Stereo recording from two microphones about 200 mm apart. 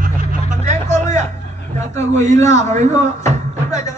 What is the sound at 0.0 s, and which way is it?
Vehicle, 40° right (ahead or behind).